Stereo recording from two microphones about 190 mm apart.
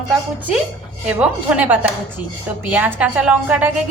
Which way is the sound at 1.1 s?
5° right (ahead or behind).